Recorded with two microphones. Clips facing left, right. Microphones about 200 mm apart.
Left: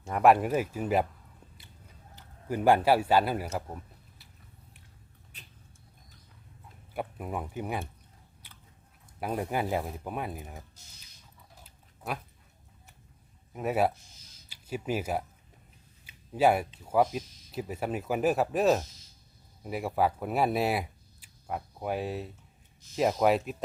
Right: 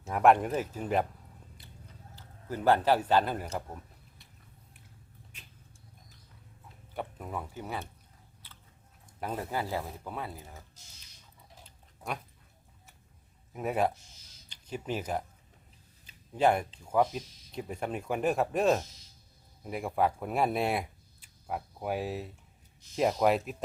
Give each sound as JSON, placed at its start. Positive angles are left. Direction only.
{"t": 0.0, "sound": "speech", "side_deg": 0}
{"t": 2.1, "sound": "a man's voice", "side_deg": 15}
{"t": 5.3, "sound": "vehicle", "side_deg": 35}
{"t": 6.9, "sound": "speech", "side_deg": 10}
{"t": 9.2, "sound": "speech", "side_deg": 15}
{"t": 11.6, "sound": "dog", "side_deg": 5}
{"t": 13.5, "sound": "speech", "side_deg": 0}
{"t": 16.0, "sound": "a sound", "side_deg": 5}
{"t": 16.8, "sound": "speech", "side_deg": 5}